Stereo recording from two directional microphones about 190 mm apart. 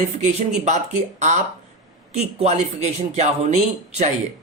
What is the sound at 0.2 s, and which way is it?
Speech, 35° right (ahead or behind).